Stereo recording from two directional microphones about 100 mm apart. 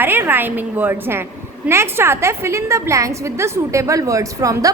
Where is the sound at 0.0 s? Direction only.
20° right (ahead or behind).